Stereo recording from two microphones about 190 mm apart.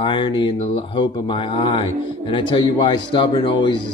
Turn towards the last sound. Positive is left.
turn(degrees=25)  # may be behind; listen again after turning